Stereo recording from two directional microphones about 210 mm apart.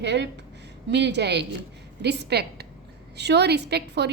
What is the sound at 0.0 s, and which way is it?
A woman's voice, 55° right (ahead or behind).